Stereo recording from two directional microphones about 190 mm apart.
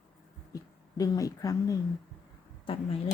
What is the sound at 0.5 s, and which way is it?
Speech, 20° left (ahead or behind).